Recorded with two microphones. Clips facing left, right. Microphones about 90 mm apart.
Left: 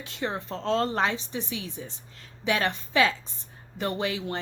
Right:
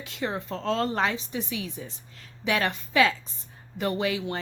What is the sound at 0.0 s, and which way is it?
A woman's voice, 35° left (ahead or behind).